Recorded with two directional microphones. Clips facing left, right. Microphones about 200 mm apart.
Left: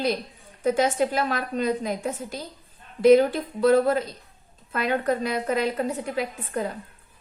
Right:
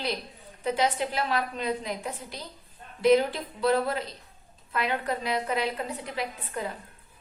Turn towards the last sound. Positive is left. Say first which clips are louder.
# left 5 dB
turn(degrees=45)  # may be behind; listen again after turning